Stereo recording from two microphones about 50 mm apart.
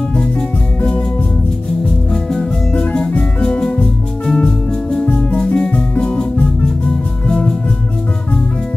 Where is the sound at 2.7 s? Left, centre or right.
Left.